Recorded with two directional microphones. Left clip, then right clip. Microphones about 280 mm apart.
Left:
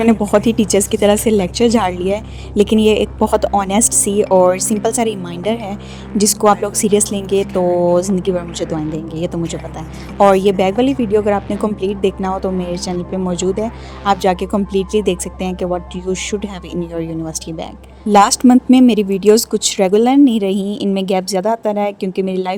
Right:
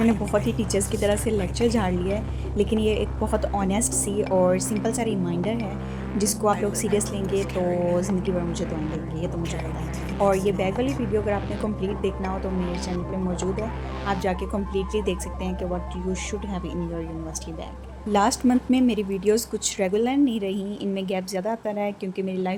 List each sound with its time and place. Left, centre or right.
0.0 s speech: left
10.2 s speech: left
18.1 s speech: left